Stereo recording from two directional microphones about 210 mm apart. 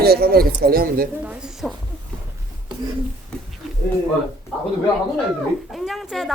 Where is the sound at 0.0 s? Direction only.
45° right (ahead or behind).